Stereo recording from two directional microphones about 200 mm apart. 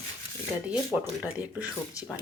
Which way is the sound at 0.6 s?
5° right (ahead or behind).